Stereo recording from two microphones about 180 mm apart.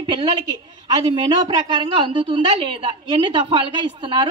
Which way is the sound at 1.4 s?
25° right (ahead or behind).